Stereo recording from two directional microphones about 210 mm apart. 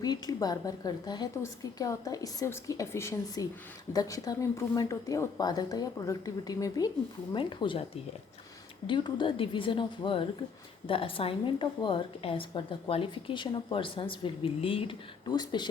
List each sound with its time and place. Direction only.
0.0 s a woman's voice: 20° left (ahead or behind)
8.9 s a woman's voice: 20° left (ahead or behind)